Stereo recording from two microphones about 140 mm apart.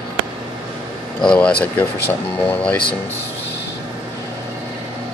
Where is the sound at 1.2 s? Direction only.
5° left (ahead or behind).